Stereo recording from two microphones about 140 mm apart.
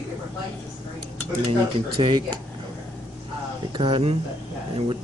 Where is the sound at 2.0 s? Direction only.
35° right (ahead or behind).